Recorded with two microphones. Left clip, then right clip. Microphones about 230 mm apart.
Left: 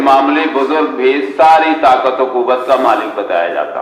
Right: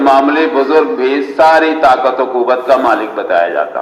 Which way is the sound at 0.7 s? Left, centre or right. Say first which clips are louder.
Right 2 dB; right.